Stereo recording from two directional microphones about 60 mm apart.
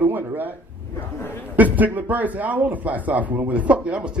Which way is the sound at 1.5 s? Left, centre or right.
Right.